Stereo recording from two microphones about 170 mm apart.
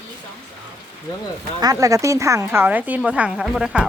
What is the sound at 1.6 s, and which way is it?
A woman's voice, 20° right (ahead or behind).